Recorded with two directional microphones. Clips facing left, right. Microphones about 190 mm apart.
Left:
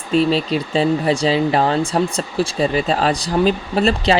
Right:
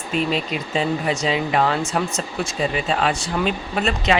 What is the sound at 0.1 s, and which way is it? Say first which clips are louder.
Speech: left 6 dB; 35° left (ahead or behind).